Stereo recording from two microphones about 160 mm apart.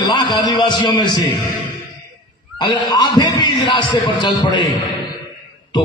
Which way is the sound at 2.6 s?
30° left (ahead or behind).